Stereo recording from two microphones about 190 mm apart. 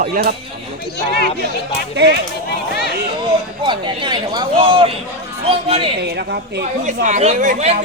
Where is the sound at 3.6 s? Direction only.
25° right (ahead or behind).